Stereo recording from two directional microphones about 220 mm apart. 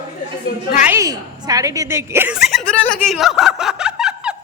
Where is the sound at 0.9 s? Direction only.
15° right (ahead or behind).